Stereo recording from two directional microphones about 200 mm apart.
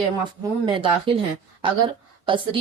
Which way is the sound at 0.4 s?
25° right (ahead or behind).